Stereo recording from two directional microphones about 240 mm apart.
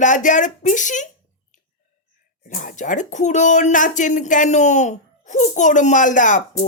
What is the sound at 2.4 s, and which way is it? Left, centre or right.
Speech, left.